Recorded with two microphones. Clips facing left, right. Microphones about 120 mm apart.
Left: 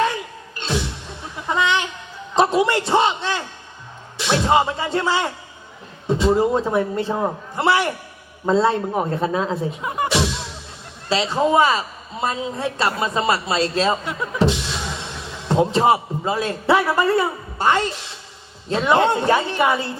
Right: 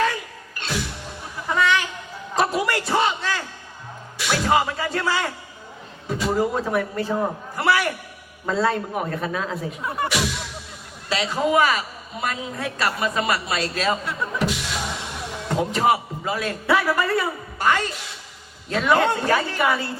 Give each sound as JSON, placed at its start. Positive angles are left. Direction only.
{"t": 0.0, "sound": "music", "side_deg": 25}
{"t": 1.5, "sound": "a sound", "side_deg": 20}
{"t": 4.2, "sound": "a man's voice", "side_deg": 25}
{"t": 9.8, "sound": "a man's voice", "side_deg": 20}